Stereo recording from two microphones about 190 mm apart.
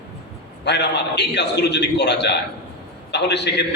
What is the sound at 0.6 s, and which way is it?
A man's voice, 60° left (ahead or behind).